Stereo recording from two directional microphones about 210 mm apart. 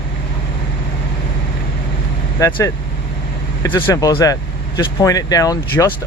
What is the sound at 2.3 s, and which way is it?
Speech, 15° left (ahead or behind).